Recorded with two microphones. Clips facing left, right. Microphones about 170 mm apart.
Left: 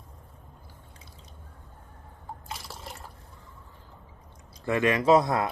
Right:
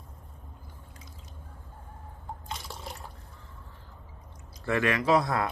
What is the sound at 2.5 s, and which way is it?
Liquid, centre (ahead or behind).